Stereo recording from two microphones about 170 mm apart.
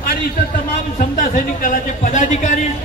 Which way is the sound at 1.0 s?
55° left (ahead or behind).